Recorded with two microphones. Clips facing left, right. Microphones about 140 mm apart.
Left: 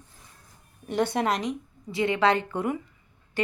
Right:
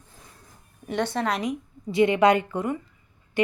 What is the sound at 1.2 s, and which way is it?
Speech, centre (ahead or behind).